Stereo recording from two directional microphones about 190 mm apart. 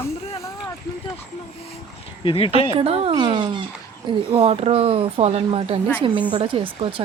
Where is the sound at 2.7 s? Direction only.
30° right (ahead or behind).